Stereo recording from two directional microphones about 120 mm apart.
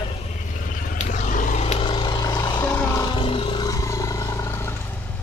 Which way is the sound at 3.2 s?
45° left (ahead or behind).